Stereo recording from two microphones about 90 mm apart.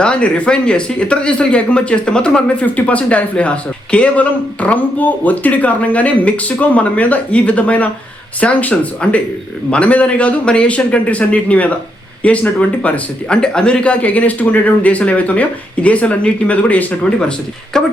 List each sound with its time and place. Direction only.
0.0 s speech: 15° left (ahead or behind)